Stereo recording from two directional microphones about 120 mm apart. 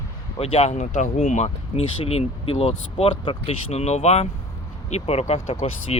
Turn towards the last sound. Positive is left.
turn(degrees=55)  # may be behind; listen again after turning